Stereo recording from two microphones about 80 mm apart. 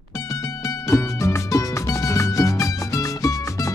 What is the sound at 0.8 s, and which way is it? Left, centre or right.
Music, left.